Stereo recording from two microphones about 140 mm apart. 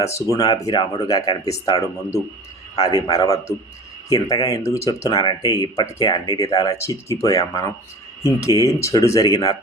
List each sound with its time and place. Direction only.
0.0 s speech: 25° left (ahead or behind)